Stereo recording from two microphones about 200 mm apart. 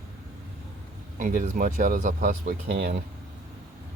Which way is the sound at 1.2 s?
40° right (ahead or behind).